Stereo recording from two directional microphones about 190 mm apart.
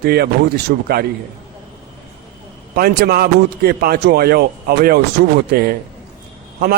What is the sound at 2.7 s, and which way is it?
A man's voice, 55° right (ahead or behind).